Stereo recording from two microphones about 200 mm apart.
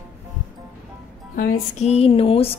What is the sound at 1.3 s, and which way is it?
Music, 45° left (ahead or behind).